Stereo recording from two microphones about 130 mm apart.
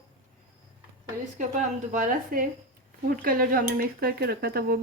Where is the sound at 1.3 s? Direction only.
70° right (ahead or behind); by 3.6 s 90° right.